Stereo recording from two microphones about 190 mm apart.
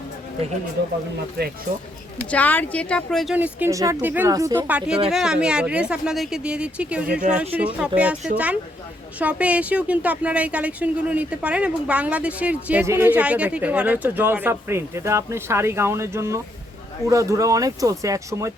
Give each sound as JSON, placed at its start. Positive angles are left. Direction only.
{"t": 1.4, "sound": "speech", "side_deg": -55}
{"t": 2.3, "sound": "speech", "side_deg": 10}
{"t": 3.3, "sound": "a woman's voice", "side_deg": -10}